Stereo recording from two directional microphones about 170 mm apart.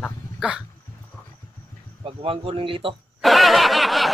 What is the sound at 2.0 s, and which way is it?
Speech, 35° right (ahead or behind).